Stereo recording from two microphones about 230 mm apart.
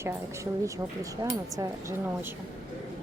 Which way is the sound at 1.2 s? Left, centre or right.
Centre.